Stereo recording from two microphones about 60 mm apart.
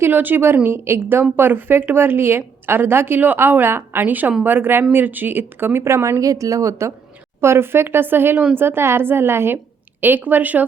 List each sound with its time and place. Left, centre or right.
0.0 s a woman's voice: right
5.8 s a woman's voice: right
7.4 s a woman's voice: right
10.0 s a woman's voice: right